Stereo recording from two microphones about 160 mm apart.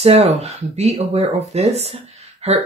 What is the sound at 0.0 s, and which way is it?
Speech, 40° right (ahead or behind).